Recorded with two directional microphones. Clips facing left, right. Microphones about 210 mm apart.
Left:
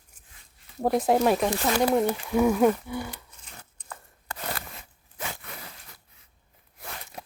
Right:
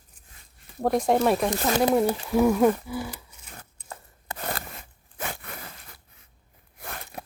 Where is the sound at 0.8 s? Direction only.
5° left (ahead or behind).